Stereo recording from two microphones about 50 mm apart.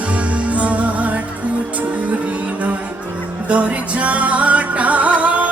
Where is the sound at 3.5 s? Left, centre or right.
Right.